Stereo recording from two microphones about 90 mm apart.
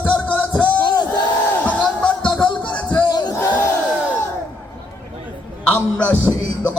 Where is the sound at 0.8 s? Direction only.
50° left (ahead or behind).